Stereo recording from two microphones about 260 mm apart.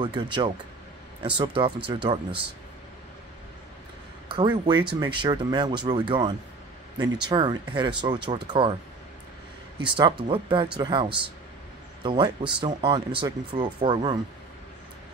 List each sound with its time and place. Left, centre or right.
0.0 s speech: centre
4.3 s speech: centre
9.8 s speech: centre